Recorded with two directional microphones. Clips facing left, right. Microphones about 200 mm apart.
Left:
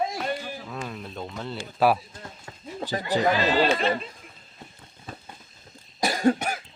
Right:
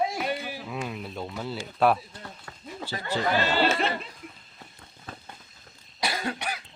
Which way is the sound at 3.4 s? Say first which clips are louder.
Left 3 dB; 15° left (ahead or behind).